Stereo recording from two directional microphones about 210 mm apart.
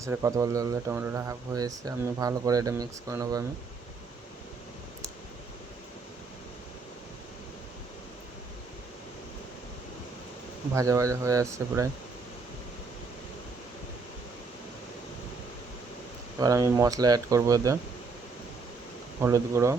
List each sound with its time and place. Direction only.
0.0 s speech: 15° right (ahead or behind)
10.8 s speech: 15° right (ahead or behind)
16.4 s speech: 15° right (ahead or behind)
19.2 s speech: 15° right (ahead or behind)